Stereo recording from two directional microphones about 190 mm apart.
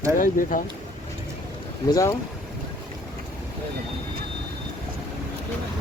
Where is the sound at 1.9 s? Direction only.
15° left (ahead or behind).